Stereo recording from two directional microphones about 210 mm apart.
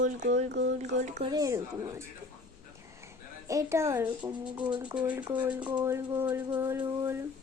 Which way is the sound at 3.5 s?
15° right (ahead or behind).